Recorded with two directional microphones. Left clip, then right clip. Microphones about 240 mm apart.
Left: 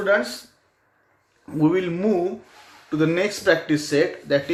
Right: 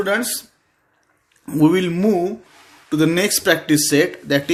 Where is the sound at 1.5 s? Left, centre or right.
Right.